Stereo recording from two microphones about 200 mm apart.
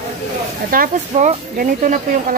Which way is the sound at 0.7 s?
40° right (ahead or behind).